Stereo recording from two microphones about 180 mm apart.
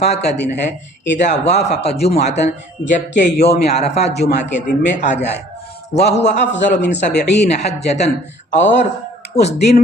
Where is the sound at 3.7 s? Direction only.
35° left (ahead or behind).